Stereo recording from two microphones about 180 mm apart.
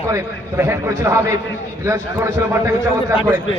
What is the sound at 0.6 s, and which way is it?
A man's voice, 15° right (ahead or behind).